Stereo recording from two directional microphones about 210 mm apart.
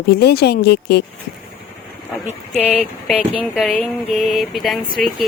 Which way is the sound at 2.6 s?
5° right (ahead or behind).